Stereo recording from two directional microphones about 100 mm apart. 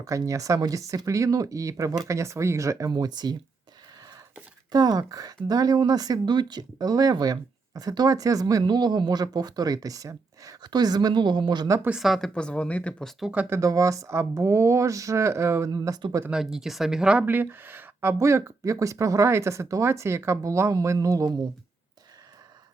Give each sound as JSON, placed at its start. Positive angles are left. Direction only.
{"t": 0.0, "sound": "speech", "side_deg": -35}
{"t": 2.9, "sound": "speech", "side_deg": -45}
{"t": 4.7, "sound": "speech", "side_deg": -40}
{"t": 11.9, "sound": "speech", "side_deg": -5}
{"t": 12.3, "sound": "speech", "side_deg": 10}
{"t": 13.3, "sound": "speech", "side_deg": -15}
{"t": 13.6, "sound": "speech", "side_deg": -35}
{"t": 15.7, "sound": "speech", "side_deg": -40}
{"t": 16.3, "sound": "speech", "side_deg": -5}